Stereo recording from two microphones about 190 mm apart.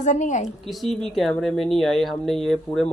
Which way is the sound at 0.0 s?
40° left (ahead or behind).